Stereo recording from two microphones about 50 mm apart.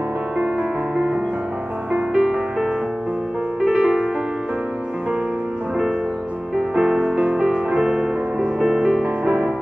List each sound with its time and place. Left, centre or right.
2.1 s music: centre
6.7 s music: centre
9.0 s music: right